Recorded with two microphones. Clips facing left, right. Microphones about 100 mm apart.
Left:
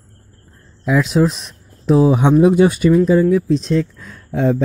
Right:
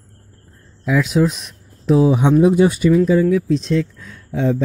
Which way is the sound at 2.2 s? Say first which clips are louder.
Left 1 dB; 60° left (ahead or behind).